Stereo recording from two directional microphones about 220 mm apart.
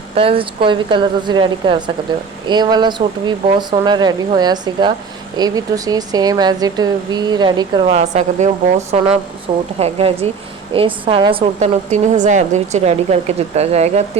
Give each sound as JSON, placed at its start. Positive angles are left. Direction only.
{"t": 0.1, "sound": "a woman's voice", "side_deg": -25}
{"t": 9.7, "sound": "a woman's voice", "side_deg": -25}